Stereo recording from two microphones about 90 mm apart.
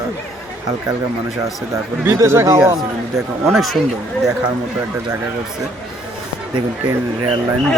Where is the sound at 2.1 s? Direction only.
30° right (ahead or behind).